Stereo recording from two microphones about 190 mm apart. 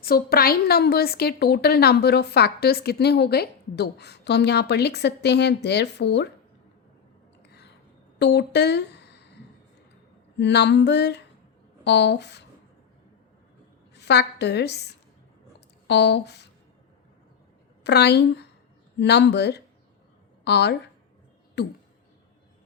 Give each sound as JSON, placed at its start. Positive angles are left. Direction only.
{"t": 0.0, "sound": "a woman's voice", "side_deg": 55}
{"t": 8.2, "sound": "speech", "side_deg": 60}
{"t": 10.3, "sound": "a woman's voice", "side_deg": 65}
{"t": 13.9, "sound": "a woman's voice", "side_deg": 60}
{"t": 17.8, "sound": "a woman's voice", "side_deg": 60}